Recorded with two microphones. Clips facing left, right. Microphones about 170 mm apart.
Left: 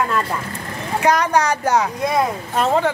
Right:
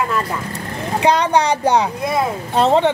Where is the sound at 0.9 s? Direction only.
30° right (ahead or behind).